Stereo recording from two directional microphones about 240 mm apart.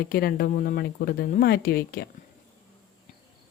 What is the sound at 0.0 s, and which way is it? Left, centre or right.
A woman's voice, left.